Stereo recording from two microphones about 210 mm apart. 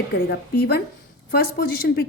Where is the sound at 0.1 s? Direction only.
45° left (ahead or behind).